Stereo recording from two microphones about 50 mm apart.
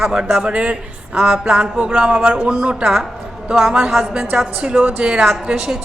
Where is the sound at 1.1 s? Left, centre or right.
Centre.